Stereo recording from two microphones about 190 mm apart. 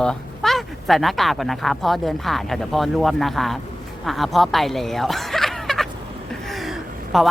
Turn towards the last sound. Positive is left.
turn(degrees=0)  # may be behind; listen again after turning